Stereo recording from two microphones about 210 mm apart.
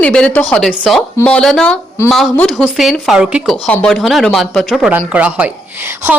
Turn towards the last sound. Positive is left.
turn(degrees=-10)  # may be behind; listen again after turning